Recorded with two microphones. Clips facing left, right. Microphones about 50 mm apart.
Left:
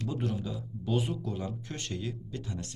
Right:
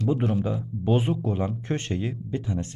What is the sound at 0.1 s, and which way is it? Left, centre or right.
Speech, right.